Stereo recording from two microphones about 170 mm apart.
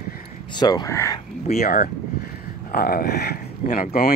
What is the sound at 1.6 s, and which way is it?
Speech, 55° left (ahead or behind).